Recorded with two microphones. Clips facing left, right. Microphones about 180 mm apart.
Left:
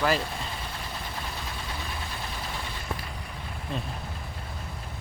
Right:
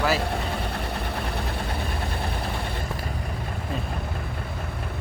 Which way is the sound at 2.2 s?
60° right (ahead or behind).